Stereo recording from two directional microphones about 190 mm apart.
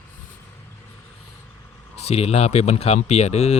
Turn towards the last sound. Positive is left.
turn(degrees=35)  # may be behind; listen again after turning